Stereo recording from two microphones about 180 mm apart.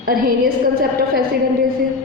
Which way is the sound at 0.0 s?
55° right (ahead or behind).